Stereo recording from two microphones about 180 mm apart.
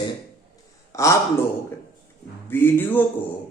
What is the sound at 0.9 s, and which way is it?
Speech, 15° left (ahead or behind).